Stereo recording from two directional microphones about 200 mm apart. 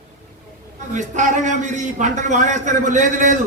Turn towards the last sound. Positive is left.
turn(degrees=-40)  # may be behind; listen again after turning